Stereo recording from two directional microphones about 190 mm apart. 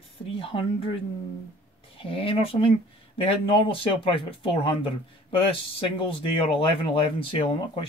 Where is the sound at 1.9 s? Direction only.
30° left (ahead or behind).